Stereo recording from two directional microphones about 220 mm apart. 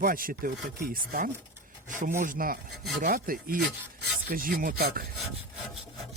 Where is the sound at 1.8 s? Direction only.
35° right (ahead or behind).